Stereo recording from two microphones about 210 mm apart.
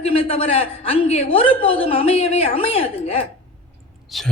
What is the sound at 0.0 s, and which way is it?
A woman's voice, 25° left (ahead or behind).